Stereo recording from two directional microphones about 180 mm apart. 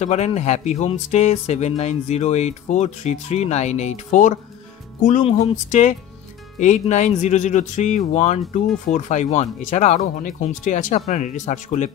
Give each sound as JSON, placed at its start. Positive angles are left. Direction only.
{"t": 0.0, "sound": "speech", "side_deg": 40}